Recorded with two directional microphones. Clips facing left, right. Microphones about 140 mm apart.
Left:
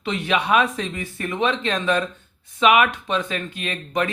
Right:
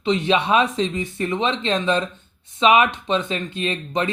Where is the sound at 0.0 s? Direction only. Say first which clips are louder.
Right 4 dB; 25° right (ahead or behind).